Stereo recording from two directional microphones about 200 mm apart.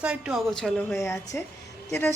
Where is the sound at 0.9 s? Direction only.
15° left (ahead or behind).